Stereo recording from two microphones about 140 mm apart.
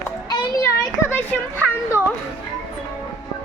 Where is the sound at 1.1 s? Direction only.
15° left (ahead or behind).